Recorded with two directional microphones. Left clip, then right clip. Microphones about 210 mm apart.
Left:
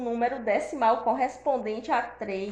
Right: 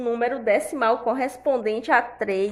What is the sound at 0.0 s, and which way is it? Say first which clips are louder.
A woman's voice: right 4 dB; 45° right (ahead or behind).